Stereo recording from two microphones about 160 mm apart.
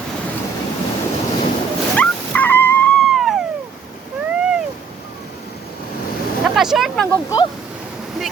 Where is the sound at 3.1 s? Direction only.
Centre (ahead or behind).